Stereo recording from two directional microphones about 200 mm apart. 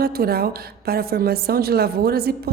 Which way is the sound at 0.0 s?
50° right (ahead or behind).